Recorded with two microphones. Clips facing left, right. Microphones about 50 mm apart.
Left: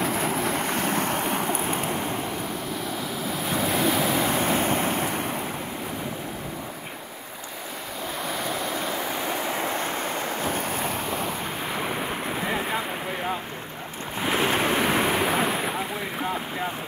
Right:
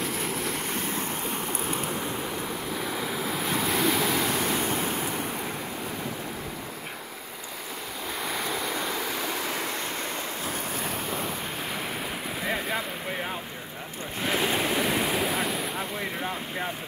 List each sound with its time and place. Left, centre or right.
0.0 s waves: left
1.7 s vehicle: left
3.0 s waves: centre
4.3 s waves: left
8.2 s waves: centre; by 9.8 s left
14.3 s waves: left
15.3 s ocean: left